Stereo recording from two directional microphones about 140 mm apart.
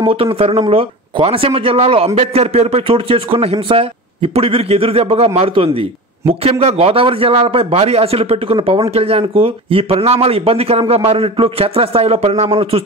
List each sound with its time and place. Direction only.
0.0 s a man's voice: 40° right (ahead or behind)